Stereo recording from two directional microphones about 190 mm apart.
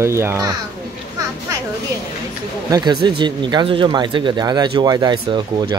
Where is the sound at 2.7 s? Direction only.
20° right (ahead or behind).